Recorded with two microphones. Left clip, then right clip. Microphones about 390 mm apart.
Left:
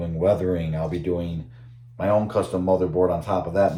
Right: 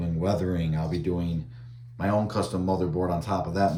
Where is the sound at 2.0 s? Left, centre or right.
Centre.